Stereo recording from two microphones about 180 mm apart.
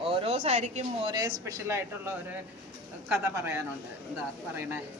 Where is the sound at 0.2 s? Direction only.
35° right (ahead or behind).